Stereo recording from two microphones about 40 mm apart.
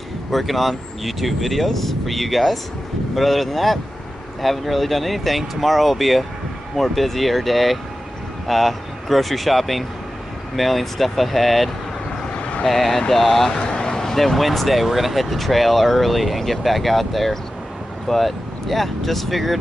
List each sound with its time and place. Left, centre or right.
0.3 s speech: centre
12.4 s vehicle: left
12.6 s speech: centre
13.5 s vehicle: left
13.9 s speech: centre